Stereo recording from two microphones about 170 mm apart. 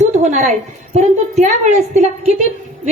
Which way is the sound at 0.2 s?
40° right (ahead or behind).